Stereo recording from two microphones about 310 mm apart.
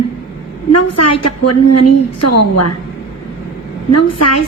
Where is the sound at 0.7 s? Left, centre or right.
Left.